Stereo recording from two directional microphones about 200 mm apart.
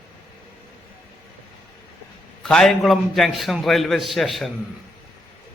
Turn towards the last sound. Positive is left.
turn(degrees=0)  # may be behind; listen again after turning